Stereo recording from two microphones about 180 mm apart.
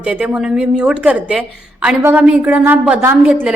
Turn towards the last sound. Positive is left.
turn(degrees=-10)  # may be behind; listen again after turning